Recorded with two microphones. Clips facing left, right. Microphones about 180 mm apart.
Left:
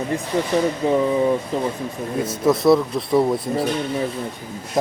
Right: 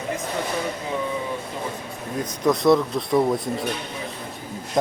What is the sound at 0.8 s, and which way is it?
Speech, 35° left (ahead or behind).